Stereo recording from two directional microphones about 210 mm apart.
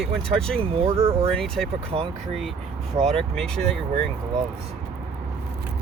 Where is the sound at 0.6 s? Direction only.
25° right (ahead or behind).